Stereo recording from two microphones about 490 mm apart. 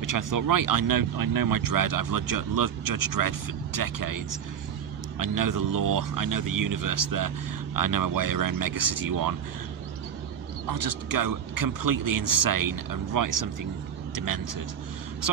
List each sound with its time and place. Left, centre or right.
0.0 s speech: right
5.2 s speech: right
10.7 s speech: right